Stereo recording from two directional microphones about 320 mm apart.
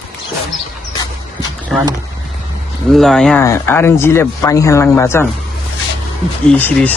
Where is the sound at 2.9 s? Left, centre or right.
Centre.